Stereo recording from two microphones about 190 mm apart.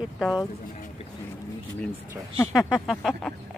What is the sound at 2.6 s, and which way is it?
Speech, centre (ahead or behind).